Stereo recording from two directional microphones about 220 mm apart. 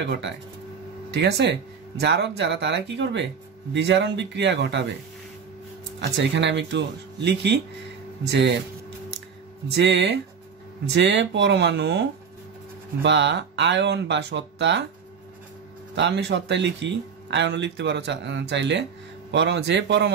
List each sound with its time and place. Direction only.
0.0 s speech: 55° right (ahead or behind)
5.9 s speech: 55° right (ahead or behind)
9.7 s speech: 50° right (ahead or behind)
15.9 s speech: 55° right (ahead or behind)